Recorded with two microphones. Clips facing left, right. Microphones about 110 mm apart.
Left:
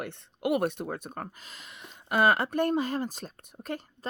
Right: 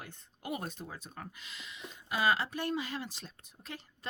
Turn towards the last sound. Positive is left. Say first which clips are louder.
# left 11 dB
turn(degrees=50)  # may be behind; listen again after turning